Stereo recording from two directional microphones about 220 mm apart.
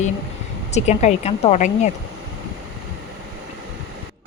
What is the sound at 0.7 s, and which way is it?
A woman's voice, 30° left (ahead or behind).